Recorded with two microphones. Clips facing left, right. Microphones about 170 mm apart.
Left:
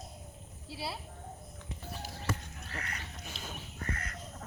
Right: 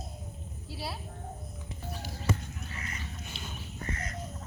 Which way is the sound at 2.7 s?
65° left (ahead or behind).